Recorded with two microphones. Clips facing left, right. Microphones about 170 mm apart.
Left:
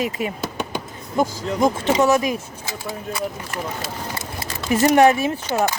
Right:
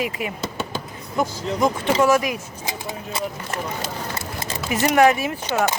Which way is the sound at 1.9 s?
20° left (ahead or behind).